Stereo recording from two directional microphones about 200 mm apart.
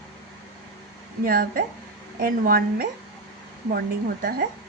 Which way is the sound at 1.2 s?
50° right (ahead or behind).